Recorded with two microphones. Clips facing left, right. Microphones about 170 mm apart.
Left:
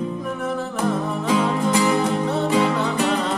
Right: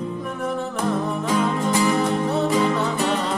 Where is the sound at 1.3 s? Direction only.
5° left (ahead or behind).